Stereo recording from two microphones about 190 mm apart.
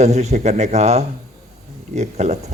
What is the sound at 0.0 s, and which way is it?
Speech, 35° right (ahead or behind).